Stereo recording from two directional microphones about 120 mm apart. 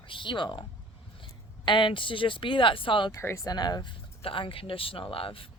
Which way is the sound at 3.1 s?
25° left (ahead or behind).